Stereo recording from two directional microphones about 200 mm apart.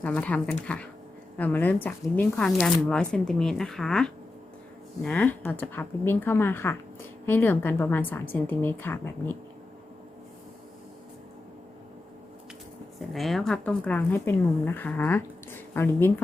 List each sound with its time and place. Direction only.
0.0 s a woman's voice: 5° left (ahead or behind)
13.0 s a woman's voice: centre (ahead or behind)